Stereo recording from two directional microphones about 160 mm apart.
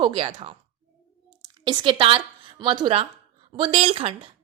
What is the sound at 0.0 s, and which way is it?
Speech, 30° right (ahead or behind).